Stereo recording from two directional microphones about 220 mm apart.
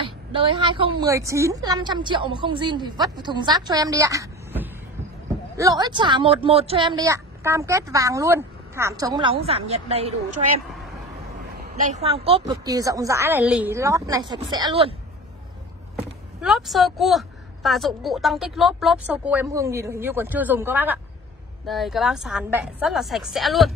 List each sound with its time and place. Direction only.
0.0 s speech: 25° right (ahead or behind)
11.8 s a woman's voice: 30° right (ahead or behind)
16.3 s a woman's voice: centre (ahead or behind)